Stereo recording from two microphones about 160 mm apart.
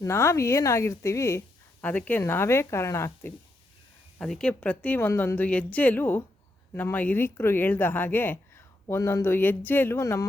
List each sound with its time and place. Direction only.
0.0 s speech: 15° left (ahead or behind)
4.2 s speech: 5° left (ahead or behind)